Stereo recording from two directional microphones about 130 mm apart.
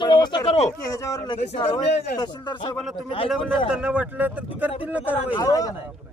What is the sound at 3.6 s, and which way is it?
Speech, 5° right (ahead or behind).